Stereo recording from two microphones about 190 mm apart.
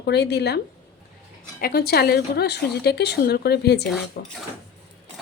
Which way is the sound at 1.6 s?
55° left (ahead or behind).